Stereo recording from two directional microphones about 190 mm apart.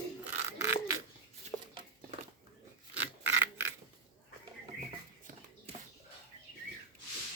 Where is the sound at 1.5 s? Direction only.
25° left (ahead or behind).